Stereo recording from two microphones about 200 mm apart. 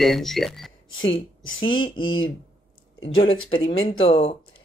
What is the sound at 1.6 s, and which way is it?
Speech, 25° left (ahead or behind).